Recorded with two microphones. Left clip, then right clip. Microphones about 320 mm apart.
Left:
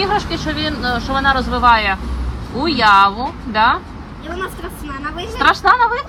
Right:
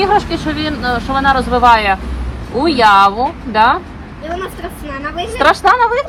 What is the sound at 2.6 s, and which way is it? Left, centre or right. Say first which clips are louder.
Speech: right 3 dB; centre.